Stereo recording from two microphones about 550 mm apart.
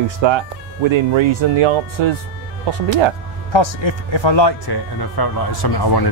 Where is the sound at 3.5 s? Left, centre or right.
Left.